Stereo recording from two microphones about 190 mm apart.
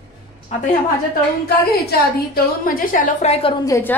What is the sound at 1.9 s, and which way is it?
A woman's voice, 50° left (ahead or behind).